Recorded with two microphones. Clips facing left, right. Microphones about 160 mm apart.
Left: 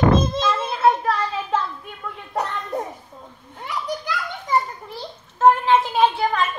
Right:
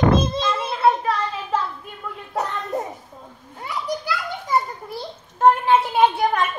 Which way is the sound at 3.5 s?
5° right (ahead or behind).